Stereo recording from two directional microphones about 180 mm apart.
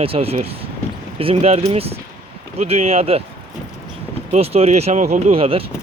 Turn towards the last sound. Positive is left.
turn(degrees=-30)  # may be behind; listen again after turning